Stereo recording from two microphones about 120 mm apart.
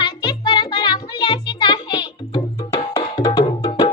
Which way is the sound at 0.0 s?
35° left (ahead or behind).